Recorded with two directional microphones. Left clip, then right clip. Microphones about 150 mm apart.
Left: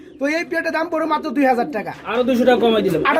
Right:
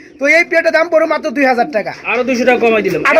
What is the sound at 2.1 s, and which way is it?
Speech, 30° left (ahead or behind).